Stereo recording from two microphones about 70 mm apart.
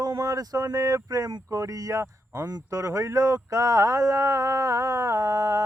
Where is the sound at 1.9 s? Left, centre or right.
Right.